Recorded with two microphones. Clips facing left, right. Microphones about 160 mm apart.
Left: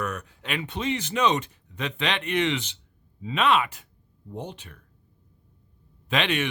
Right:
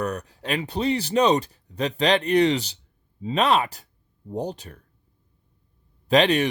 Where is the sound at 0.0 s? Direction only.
35° right (ahead or behind).